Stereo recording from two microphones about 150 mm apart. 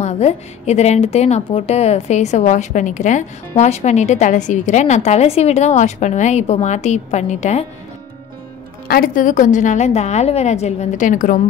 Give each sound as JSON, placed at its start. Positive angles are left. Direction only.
{"t": 0.0, "sound": "a woman's voice", "side_deg": 50}
{"t": 8.8, "sound": "a woman's voice", "side_deg": 80}